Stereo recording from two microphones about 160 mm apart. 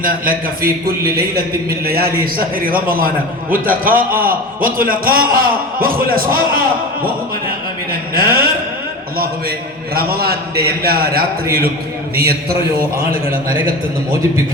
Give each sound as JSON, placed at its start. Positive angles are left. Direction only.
{"t": 0.0, "sound": "a man's voice", "side_deg": -60}
{"t": 8.1, "sound": "a man's voice", "side_deg": -65}
{"t": 13.1, "sound": "a man's voice", "side_deg": -65}